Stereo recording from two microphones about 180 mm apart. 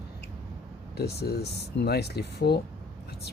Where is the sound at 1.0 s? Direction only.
60° left (ahead or behind).